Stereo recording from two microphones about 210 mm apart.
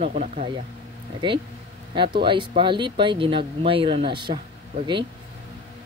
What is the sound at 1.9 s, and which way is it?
Speech, 20° right (ahead or behind).